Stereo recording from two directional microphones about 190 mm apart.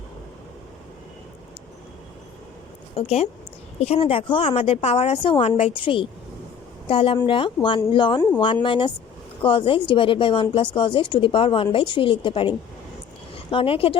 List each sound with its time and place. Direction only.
2.9 s a woman's voice: 30° left (ahead or behind)